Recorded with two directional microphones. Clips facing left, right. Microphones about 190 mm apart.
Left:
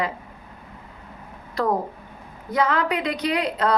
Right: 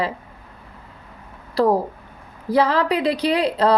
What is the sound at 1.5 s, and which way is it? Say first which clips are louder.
A woman's voice: right 5 dB; 35° right (ahead or behind).